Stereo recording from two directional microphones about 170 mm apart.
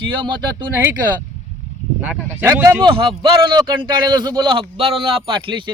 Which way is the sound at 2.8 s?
30° right (ahead or behind).